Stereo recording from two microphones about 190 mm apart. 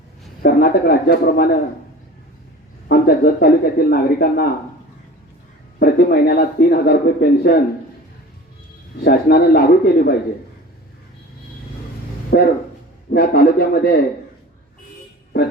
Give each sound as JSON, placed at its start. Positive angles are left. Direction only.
{"t": 0.4, "sound": "speech", "side_deg": 55}
{"t": 2.9, "sound": "speech", "side_deg": 55}
{"t": 5.8, "sound": "speech", "side_deg": 55}
{"t": 9.0, "sound": "speech", "side_deg": 55}
{"t": 12.3, "sound": "speech", "side_deg": 60}